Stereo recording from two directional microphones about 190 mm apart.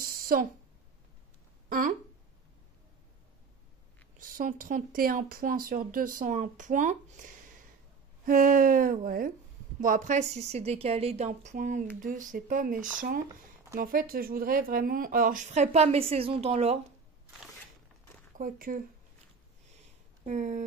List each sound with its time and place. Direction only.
0.0 s a sound: 50° right (ahead or behind)
1.7 s speech: 45° right (ahead or behind)
4.2 s a woman's voice: 45° right (ahead or behind)
18.4 s speech: 45° right (ahead or behind)
20.2 s a woman's voice: 40° right (ahead or behind)